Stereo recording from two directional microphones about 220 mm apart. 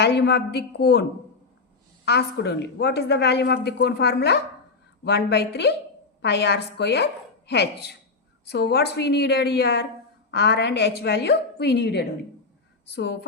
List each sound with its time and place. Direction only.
0.0 s a woman's voice: 50° left (ahead or behind)
2.0 s a woman's voice: 50° left (ahead or behind)